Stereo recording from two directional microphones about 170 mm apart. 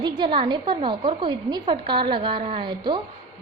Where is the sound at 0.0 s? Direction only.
25° right (ahead or behind).